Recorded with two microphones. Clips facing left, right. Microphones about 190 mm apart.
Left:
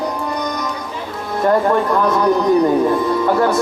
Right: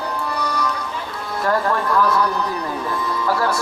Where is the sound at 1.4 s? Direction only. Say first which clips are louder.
Left 6 dB; 20° left (ahead or behind).